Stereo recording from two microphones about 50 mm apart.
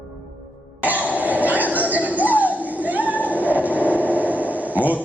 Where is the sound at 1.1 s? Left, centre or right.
Right.